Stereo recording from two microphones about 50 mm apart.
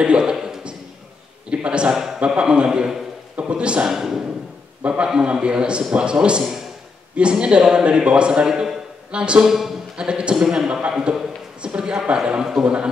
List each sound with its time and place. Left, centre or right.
0.0 s a man's voice: centre
1.5 s a sound: right
2.1 s a man's voice: centre
3.9 s a man's voice: centre
4.8 s a man's voice: right
9.5 s a man's voice: centre
9.9 s a man's voice: centre